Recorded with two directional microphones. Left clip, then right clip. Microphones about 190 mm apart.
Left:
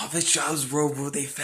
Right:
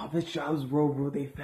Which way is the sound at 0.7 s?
15° left (ahead or behind).